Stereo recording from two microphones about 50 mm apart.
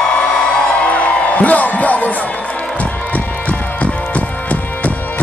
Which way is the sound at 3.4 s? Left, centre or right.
Left.